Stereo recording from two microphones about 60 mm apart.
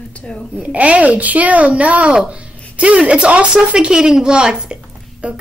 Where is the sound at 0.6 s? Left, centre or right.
Right.